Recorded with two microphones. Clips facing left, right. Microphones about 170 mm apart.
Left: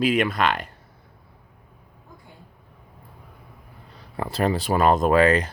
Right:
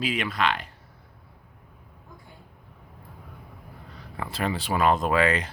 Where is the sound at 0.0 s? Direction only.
50° left (ahead or behind).